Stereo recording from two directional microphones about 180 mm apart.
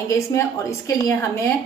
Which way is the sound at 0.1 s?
15° left (ahead or behind).